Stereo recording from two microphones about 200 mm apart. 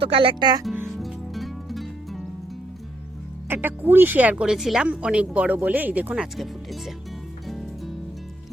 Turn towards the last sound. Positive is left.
turn(degrees=0)  # may be behind; listen again after turning